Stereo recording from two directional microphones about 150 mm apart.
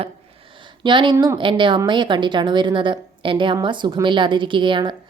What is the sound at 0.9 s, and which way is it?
Speech, 35° right (ahead or behind).